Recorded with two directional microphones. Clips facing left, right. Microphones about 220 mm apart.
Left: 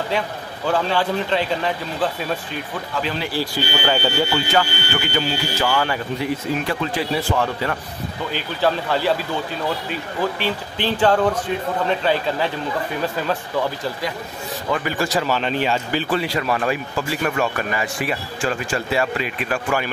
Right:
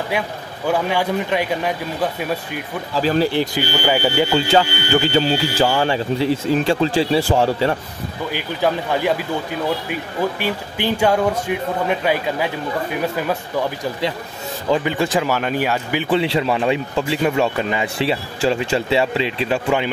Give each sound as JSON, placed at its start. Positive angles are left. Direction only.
{"t": 0.7, "sound": "speech", "side_deg": -10}
{"t": 3.0, "sound": "speech", "side_deg": -40}
{"t": 3.3, "sound": "speech", "side_deg": -15}
{"t": 4.5, "sound": "speech", "side_deg": -30}
{"t": 8.3, "sound": "speech", "side_deg": -15}
{"t": 10.4, "sound": "speech", "side_deg": -10}
{"t": 14.7, "sound": "speech", "side_deg": -20}